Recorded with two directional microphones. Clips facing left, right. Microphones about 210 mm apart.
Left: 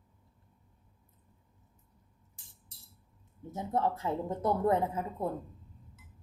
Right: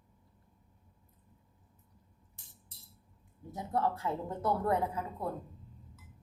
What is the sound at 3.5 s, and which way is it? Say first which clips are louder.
A woman's voice: left 2 dB; 20° left (ahead or behind).